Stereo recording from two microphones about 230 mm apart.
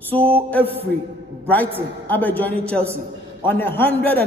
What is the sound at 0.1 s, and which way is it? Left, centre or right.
A man's voice, centre.